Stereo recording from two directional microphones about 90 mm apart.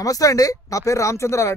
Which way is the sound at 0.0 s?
40° left (ahead or behind).